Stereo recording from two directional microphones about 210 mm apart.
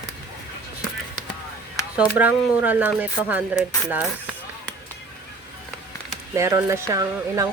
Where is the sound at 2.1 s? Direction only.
10° right (ahead or behind).